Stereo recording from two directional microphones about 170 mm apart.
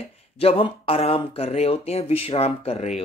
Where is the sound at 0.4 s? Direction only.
35° left (ahead or behind).